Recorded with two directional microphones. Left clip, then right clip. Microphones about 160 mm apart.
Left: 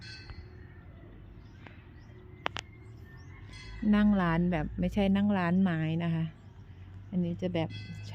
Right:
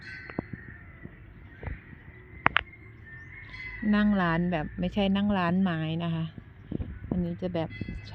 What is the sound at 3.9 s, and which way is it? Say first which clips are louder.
A woman's voice: right 2 dB; 10° left (ahead or behind).